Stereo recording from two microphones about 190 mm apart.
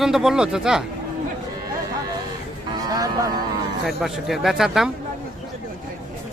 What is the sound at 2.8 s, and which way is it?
Music, 20° right (ahead or behind).